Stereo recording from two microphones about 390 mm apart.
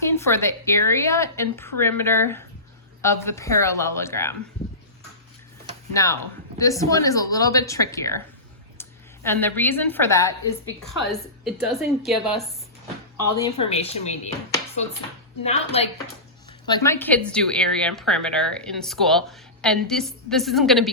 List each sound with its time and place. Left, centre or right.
0.0 s speech: centre
5.9 s a woman's voice: centre
13.6 s speech: centre